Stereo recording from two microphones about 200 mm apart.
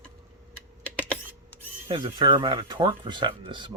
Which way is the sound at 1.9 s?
25° right (ahead or behind).